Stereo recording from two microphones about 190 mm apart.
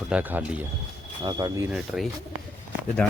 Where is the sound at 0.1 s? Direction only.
10° right (ahead or behind).